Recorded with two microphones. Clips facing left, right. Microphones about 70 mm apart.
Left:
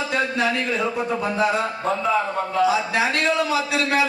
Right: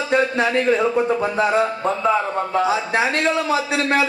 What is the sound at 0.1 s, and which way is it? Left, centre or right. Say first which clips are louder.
Speech: right 6 dB; right.